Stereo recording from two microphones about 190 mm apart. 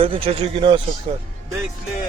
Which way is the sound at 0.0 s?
30° right (ahead or behind).